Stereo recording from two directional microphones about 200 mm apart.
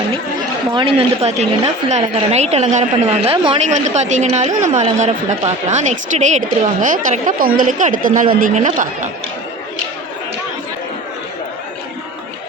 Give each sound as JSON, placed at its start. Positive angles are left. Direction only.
{"t": 0.7, "sound": "a woman's voice", "side_deg": -25}